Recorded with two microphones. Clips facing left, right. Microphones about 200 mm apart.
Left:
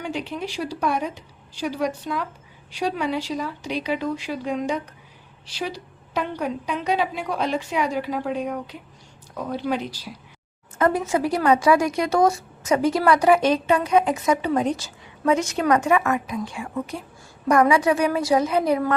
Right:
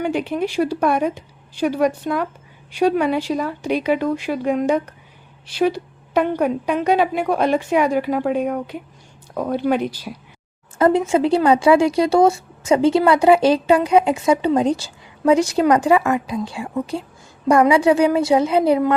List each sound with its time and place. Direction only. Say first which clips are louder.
0.0 s a woman's voice: right 8 dB; 55° right (ahead or behind)
10.8 s a woman's voice: right 5 dB; 30° right (ahead or behind)